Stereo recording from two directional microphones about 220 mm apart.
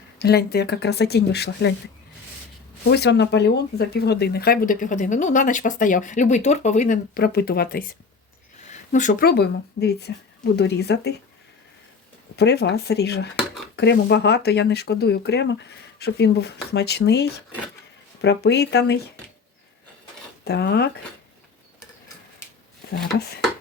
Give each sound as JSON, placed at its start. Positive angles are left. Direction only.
{"t": 0.2, "sound": "speech", "side_deg": 45}
{"t": 2.9, "sound": "speech", "side_deg": 50}
{"t": 12.4, "sound": "speech", "side_deg": 50}
{"t": 20.4, "sound": "speech", "side_deg": 50}